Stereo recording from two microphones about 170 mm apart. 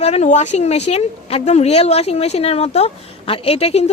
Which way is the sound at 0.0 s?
40° left (ahead or behind).